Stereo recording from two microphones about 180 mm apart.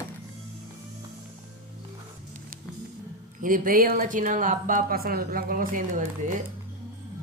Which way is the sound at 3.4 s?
50° right (ahead or behind).